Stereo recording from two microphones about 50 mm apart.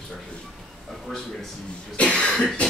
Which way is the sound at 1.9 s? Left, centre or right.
Left.